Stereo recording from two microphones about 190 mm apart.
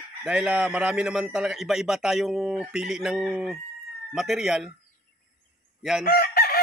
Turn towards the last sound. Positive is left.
turn(degrees=55)  # may be behind; listen again after turning